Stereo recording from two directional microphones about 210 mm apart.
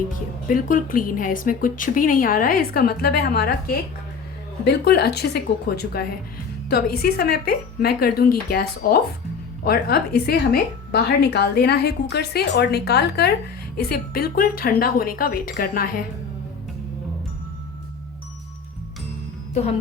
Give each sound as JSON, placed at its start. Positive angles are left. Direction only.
{"t": 0.4, "sound": "speech", "side_deg": 40}
{"t": 4.6, "sound": "a woman's voice", "side_deg": 50}